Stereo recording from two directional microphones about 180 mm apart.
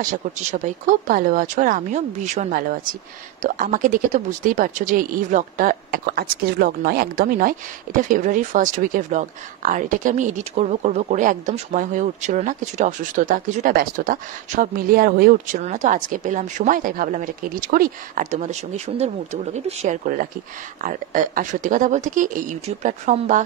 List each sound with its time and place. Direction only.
0.0 s speech: 45° right (ahead or behind)